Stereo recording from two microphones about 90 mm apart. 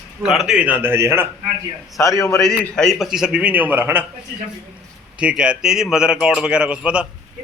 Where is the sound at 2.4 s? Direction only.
10° left (ahead or behind).